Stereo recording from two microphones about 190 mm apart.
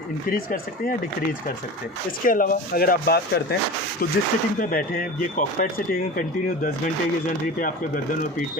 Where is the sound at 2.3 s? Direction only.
45° left (ahead or behind).